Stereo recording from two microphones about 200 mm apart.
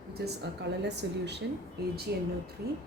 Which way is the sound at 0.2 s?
55° right (ahead or behind).